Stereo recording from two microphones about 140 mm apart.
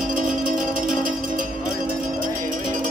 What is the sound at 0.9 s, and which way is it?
Music, 75° right (ahead or behind).